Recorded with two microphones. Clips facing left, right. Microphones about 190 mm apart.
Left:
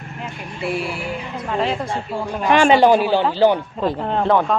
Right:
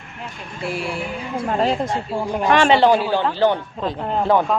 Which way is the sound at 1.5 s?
40° right (ahead or behind).